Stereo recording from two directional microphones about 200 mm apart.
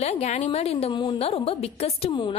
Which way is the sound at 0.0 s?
35° left (ahead or behind).